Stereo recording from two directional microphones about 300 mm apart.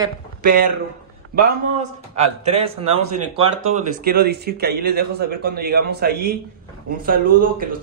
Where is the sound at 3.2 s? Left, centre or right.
Right.